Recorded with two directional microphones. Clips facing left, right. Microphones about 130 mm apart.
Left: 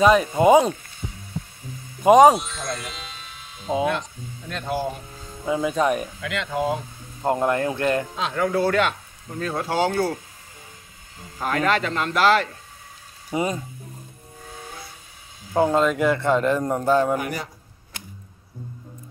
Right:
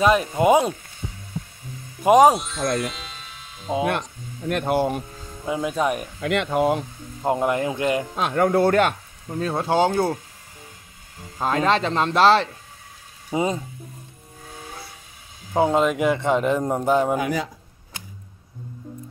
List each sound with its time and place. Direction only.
0.0 s speech: 5° right (ahead or behind)
1.0 s heart sounds: centre (ahead or behind)
2.0 s speech: centre (ahead or behind)
4.5 s speech: 60° right (ahead or behind)
5.4 s speech: 5° right (ahead or behind)
6.2 s speech: 60° right (ahead or behind)
7.2 s speech: 10° right (ahead or behind)
8.2 s speech: 55° right (ahead or behind)
9.4 s speech: 25° right (ahead or behind)
11.3 s speech: 25° right (ahead or behind)
15.5 s speech: 15° right (ahead or behind)